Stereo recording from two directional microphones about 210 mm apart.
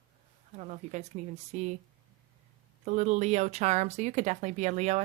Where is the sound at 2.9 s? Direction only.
35° right (ahead or behind).